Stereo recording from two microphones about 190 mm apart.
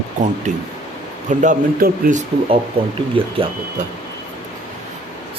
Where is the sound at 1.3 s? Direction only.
40° right (ahead or behind).